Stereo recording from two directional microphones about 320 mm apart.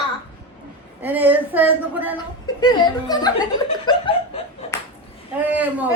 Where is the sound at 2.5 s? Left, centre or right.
Centre.